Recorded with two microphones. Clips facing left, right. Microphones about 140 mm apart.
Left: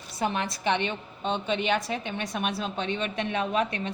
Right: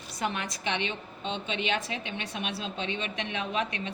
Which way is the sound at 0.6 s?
45° left (ahead or behind).